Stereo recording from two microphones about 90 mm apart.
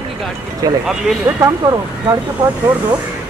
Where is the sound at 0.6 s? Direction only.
45° right (ahead or behind).